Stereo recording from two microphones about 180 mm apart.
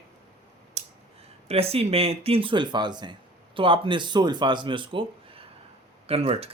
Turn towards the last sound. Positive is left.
turn(degrees=-35)  # may be behind; listen again after turning